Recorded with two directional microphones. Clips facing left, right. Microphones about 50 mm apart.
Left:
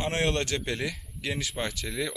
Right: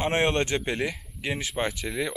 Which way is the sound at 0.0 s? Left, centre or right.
Right.